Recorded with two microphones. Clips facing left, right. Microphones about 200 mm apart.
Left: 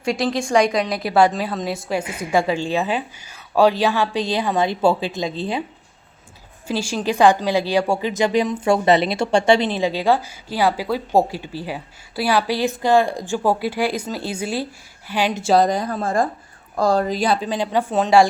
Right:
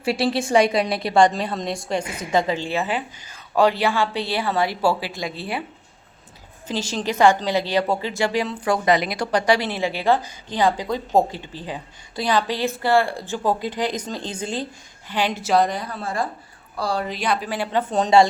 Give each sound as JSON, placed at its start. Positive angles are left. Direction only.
{"t": 0.0, "sound": "a woman's voice", "side_deg": -5}
{"t": 6.7, "sound": "a woman's voice", "side_deg": 10}
{"t": 15.4, "sound": "a woman's voice", "side_deg": 35}